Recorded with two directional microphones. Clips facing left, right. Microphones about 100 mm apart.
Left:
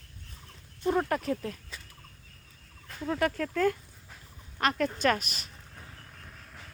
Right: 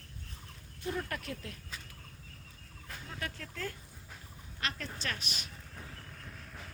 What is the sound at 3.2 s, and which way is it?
A woman's voice, 55° left (ahead or behind).